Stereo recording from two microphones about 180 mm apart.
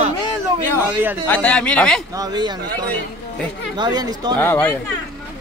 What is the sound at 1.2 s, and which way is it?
Speech, 10° left (ahead or behind).